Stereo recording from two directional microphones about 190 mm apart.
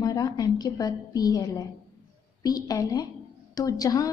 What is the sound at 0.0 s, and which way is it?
A woman's voice, 20° left (ahead or behind).